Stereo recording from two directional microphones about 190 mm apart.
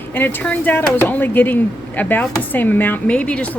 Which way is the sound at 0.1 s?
10° left (ahead or behind).